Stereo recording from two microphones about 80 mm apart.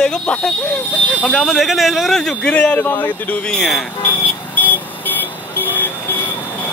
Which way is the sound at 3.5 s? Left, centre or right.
Centre.